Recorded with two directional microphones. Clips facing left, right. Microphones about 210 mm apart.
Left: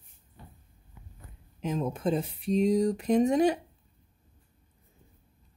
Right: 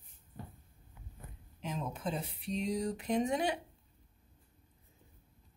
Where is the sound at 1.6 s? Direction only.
45° left (ahead or behind).